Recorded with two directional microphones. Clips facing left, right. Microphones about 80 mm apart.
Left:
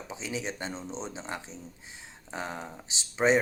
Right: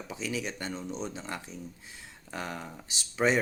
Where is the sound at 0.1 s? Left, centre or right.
Left.